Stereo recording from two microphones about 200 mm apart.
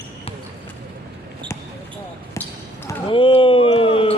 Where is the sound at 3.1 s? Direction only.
25° left (ahead or behind).